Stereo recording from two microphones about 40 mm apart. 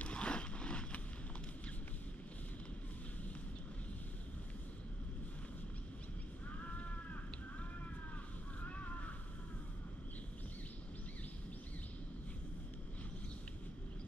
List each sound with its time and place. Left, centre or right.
0.0 s vehicle: left
6.6 s a sound: left
8.6 s crow: left